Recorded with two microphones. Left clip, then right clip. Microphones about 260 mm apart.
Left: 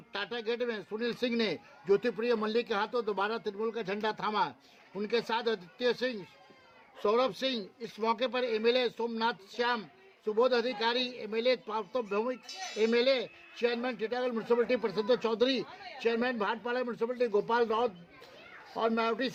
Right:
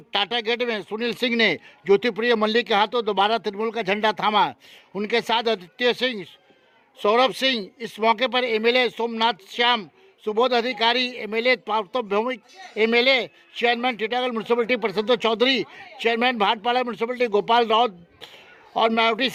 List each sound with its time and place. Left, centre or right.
0.1 s a man's voice: right